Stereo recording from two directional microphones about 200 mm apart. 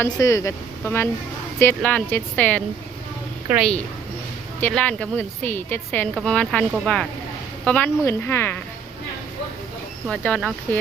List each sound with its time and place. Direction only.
0.0 s a woman's voice: 15° left (ahead or behind)
10.1 s speech: 5° left (ahead or behind)